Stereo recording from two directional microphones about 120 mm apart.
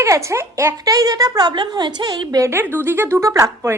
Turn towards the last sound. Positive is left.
turn(degrees=-25)  # may be behind; listen again after turning